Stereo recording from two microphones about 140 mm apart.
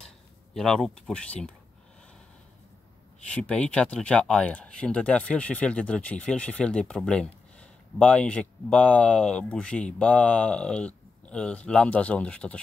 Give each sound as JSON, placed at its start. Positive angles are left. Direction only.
{"t": 0.6, "sound": "speech", "side_deg": 5}
{"t": 3.3, "sound": "speech", "side_deg": 10}